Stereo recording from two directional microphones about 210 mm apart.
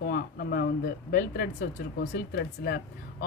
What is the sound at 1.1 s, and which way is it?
Speech, 45° left (ahead or behind).